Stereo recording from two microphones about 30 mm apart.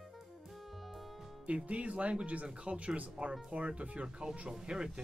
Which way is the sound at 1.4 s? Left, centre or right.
Right.